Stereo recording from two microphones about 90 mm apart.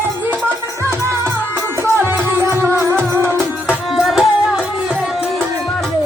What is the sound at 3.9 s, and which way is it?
Music, centre (ahead or behind).